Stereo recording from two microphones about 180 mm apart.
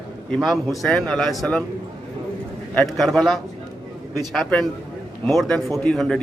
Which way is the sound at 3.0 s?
Centre (ahead or behind).